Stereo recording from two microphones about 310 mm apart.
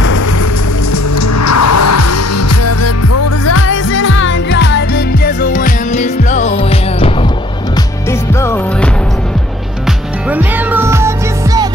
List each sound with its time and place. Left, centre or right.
1.2 s music: left; by 7.1 s centre
8.4 s music: centre
10.3 s music: centre